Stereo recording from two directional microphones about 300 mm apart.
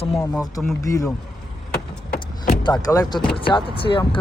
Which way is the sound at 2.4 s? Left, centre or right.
Centre.